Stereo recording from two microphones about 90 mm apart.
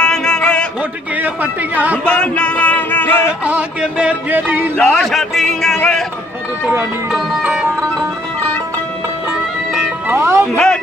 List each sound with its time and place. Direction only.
0.0 s a sound: 10° left (ahead or behind)
1.1 s music: 20° right (ahead or behind)
2.0 s music: 10° left (ahead or behind)
3.4 s music: 10° right (ahead or behind)
4.7 s music: 15° left (ahead or behind)
5.0 s speech: centre (ahead or behind)
6.7 s speech: 25° right (ahead or behind)
7.2 s music: 5° right (ahead or behind)
10.0 s music: 25° right (ahead or behind)
10.5 s music: 10° left (ahead or behind)